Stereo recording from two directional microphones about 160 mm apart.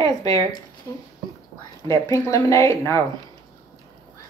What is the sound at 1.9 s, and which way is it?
Speech, 20° left (ahead or behind).